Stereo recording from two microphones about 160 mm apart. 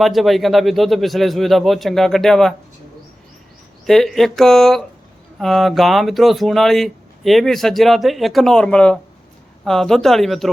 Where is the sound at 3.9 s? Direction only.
Centre (ahead or behind).